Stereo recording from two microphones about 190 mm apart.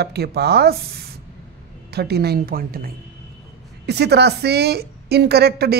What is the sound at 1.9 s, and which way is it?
A woman's voice, 55° right (ahead or behind).